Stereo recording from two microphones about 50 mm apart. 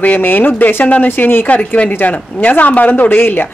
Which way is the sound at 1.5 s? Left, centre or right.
Left.